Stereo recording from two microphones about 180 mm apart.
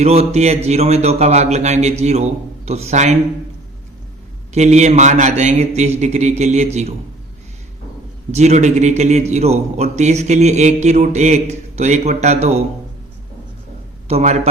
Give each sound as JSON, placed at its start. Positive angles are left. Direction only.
{"t": 0.0, "sound": "speech", "side_deg": -35}
{"t": 4.5, "sound": "speech", "side_deg": -40}
{"t": 8.3, "sound": "speech", "side_deg": -40}
{"t": 14.1, "sound": "speech", "side_deg": -35}